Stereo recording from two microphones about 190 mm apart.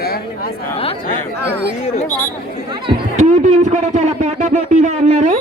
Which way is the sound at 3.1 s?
40° right (ahead or behind).